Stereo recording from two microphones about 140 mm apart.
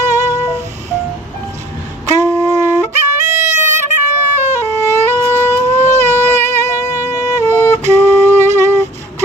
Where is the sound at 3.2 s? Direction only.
60° right (ahead or behind).